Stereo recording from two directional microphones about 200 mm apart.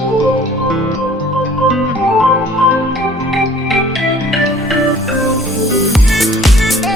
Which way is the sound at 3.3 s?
Centre (ahead or behind).